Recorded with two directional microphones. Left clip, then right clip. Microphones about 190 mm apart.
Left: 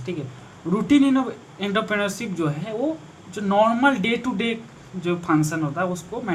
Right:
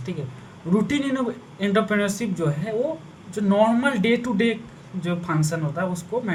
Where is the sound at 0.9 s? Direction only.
15° left (ahead or behind).